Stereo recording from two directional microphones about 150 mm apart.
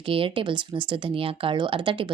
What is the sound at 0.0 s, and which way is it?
A woman's voice, 35° right (ahead or behind).